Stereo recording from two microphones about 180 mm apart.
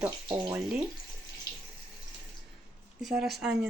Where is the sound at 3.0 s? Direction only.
Centre (ahead or behind).